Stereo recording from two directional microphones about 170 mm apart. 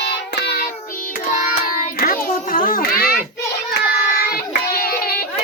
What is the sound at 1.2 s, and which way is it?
Child singing, 50° left (ahead or behind).